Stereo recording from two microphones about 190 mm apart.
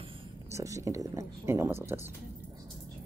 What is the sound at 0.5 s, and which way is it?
Speech, 15° right (ahead or behind).